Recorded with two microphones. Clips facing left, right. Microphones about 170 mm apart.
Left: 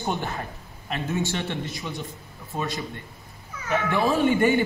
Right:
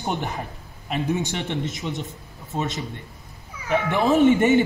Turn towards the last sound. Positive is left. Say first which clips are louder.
# right 4 dB
turn(degrees=-20)  # may be behind; listen again after turning